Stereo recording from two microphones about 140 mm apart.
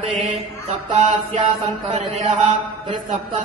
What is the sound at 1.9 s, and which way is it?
Mantra, 60° right (ahead or behind).